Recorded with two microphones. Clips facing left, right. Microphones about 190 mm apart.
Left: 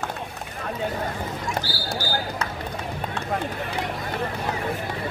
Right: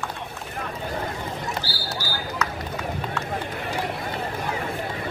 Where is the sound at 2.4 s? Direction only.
30° left (ahead or behind).